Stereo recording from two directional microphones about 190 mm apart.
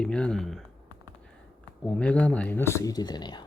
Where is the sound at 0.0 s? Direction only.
5° left (ahead or behind).